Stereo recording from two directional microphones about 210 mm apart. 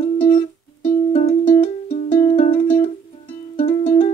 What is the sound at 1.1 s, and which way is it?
Music, 25° left (ahead or behind).